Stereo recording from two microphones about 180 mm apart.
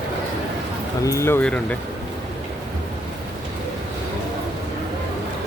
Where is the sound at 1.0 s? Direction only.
15° left (ahead or behind).